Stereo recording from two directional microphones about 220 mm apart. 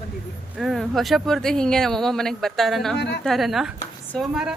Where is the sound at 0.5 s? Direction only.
Centre (ahead or behind).